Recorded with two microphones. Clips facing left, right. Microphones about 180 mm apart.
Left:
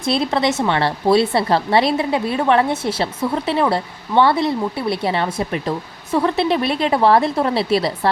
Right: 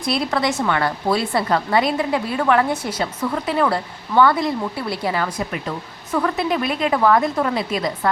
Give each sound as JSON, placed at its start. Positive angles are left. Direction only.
{"t": 0.0, "sound": "a woman's voice", "side_deg": 25}